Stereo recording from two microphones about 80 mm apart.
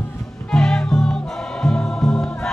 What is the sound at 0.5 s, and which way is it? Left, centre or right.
Music, centre.